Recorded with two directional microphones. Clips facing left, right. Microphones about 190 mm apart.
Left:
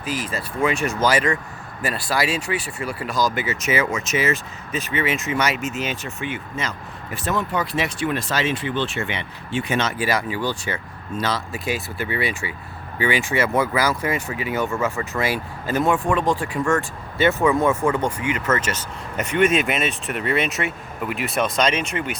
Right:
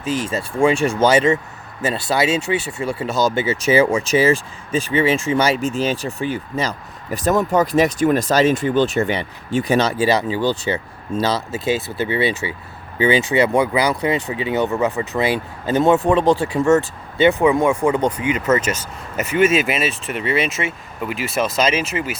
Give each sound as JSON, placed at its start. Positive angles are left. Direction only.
{"t": 0.3, "sound": "speech", "side_deg": -30}